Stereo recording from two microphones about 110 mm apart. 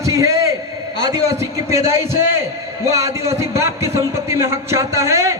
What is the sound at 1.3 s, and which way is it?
A man's voice, 25° right (ahead or behind).